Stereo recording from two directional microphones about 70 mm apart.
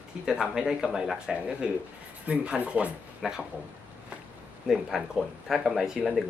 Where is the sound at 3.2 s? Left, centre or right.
Centre.